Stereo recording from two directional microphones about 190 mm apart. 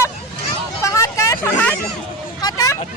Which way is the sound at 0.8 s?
15° left (ahead or behind).